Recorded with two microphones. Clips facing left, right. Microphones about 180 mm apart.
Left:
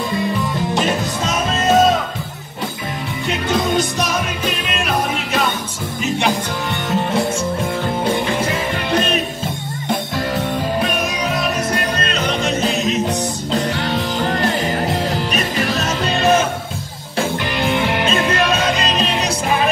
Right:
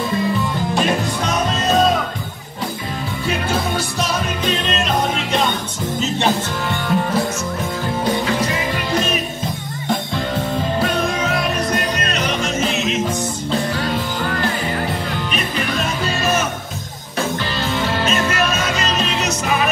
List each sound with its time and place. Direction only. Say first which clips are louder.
6.0 s music: left 1 dB; 15° left (ahead or behind)
6.9 s music: even; 25° left (ahead or behind)
8.9 s music: left 3 dB; 30° left (ahead or behind)
10.8 s music: right 1 dB; 20° left (ahead or behind)
12.0 s music: left 1 dB; 30° left (ahead or behind)
13.7 s music: left 1 dB; 25° left (ahead or behind)
17.6 s music: left 5 dB; 15° left (ahead or behind)
18.9 s music: left 2 dB; 30° left (ahead or behind)